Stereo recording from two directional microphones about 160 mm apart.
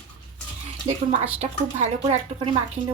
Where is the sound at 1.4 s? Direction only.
45° right (ahead or behind).